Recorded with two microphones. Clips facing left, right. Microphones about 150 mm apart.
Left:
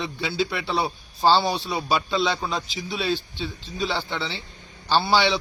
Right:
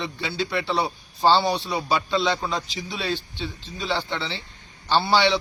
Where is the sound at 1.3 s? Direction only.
20° right (ahead or behind).